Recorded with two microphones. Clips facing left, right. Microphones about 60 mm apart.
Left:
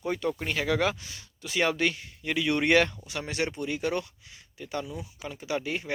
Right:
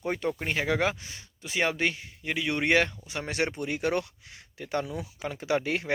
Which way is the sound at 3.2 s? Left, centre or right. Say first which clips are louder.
Right 1 dB; right.